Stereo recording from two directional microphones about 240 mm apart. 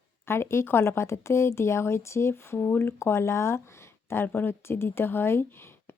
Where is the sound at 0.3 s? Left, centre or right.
Centre.